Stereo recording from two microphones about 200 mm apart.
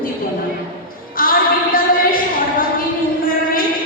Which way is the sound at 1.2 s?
45° left (ahead or behind).